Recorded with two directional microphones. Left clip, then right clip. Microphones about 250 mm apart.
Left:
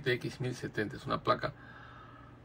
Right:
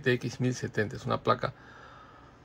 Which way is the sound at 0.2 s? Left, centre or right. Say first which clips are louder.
Right 5 dB; right.